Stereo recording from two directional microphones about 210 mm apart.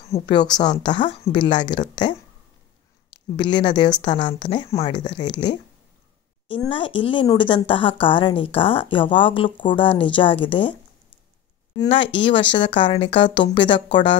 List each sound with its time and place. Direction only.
0.0 s speech: 25° left (ahead or behind)
6.5 s speech: 25° left (ahead or behind)
11.8 s speech: 25° left (ahead or behind)